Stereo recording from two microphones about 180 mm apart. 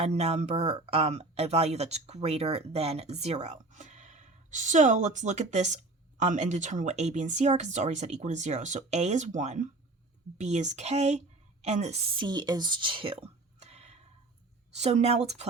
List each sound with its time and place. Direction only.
0.0 s speech: 35° right (ahead or behind)
12.1 s speech: 25° right (ahead or behind)